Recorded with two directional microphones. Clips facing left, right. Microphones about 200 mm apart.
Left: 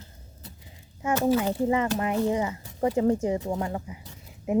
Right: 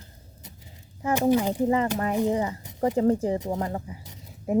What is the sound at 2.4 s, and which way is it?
Speech, 35° right (ahead or behind).